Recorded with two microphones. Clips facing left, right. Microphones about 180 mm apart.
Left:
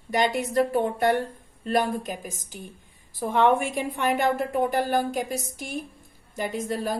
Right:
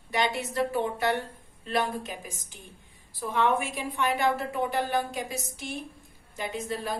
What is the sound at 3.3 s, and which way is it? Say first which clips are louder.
A woman's voice: left 5 dB; 50° left (ahead or behind).